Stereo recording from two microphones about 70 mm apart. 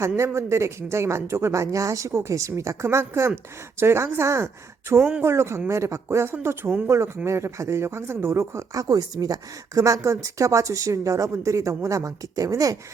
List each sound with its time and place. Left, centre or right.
0.3 s a woman's voice: right
4.9 s speech: centre
5.2 s speech: right
8.7 s a woman's voice: right